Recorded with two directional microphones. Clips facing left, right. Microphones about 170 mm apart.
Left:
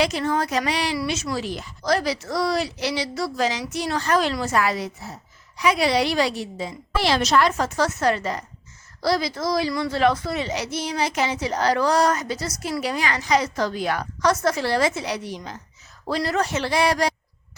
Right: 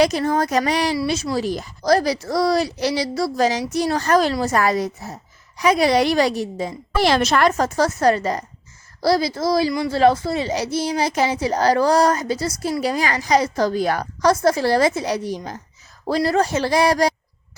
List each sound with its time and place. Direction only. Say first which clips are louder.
0.0 s a woman's voice: right 4 dB; 40° right (ahead or behind)